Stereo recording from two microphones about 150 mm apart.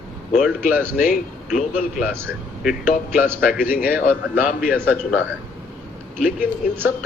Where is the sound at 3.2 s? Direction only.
5° right (ahead or behind).